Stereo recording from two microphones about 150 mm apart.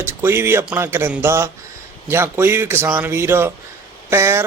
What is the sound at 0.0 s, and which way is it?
Speech, 15° right (ahead or behind).